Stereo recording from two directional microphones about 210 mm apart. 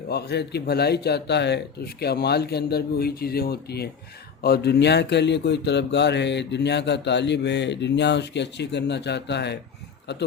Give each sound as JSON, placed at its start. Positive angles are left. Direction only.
{"t": 0.1, "sound": "speech", "side_deg": 50}